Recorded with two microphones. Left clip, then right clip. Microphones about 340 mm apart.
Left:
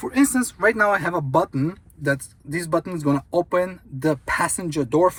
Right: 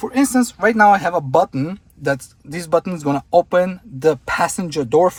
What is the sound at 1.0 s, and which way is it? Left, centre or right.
Speech, right.